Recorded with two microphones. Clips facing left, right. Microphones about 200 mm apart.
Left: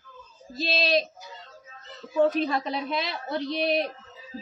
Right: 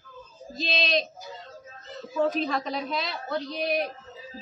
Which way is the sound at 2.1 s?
Centre (ahead or behind).